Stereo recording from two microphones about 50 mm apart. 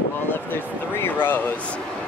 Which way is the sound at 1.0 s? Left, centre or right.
Left.